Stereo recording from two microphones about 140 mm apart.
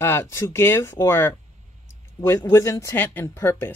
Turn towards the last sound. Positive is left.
turn(degrees=15)  # may be behind; listen again after turning